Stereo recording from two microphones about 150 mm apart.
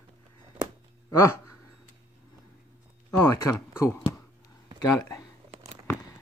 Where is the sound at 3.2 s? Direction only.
20° left (ahead or behind).